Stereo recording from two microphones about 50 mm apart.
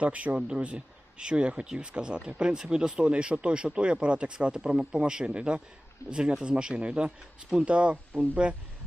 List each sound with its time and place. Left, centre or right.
0.0 s speech: right